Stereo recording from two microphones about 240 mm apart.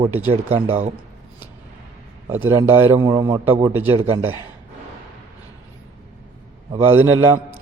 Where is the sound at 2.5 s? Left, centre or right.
Centre.